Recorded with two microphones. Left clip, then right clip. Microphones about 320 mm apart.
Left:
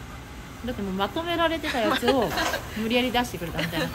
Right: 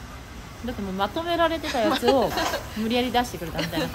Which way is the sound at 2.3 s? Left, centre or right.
Right.